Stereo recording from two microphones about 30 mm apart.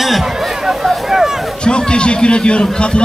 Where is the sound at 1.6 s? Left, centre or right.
Left.